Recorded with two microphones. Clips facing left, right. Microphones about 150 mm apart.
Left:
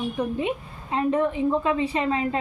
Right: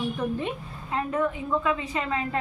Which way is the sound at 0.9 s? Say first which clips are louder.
Left 4 dB; 30° left (ahead or behind).